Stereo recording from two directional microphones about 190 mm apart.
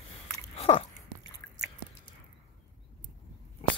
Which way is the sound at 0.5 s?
30° left (ahead or behind).